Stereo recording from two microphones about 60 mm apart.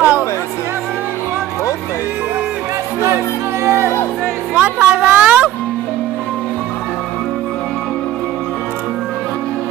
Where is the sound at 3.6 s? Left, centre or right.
Right.